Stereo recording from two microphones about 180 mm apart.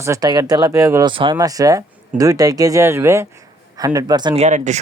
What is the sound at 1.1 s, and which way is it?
Speech, 25° right (ahead or behind).